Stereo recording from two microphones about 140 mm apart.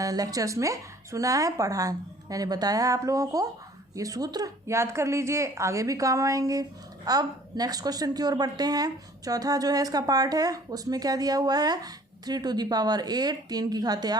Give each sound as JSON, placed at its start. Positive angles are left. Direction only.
{"t": 0.0, "sound": "a woman's voice", "side_deg": -25}